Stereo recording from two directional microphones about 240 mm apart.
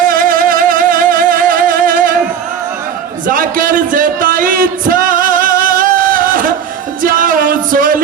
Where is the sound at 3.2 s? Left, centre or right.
Right.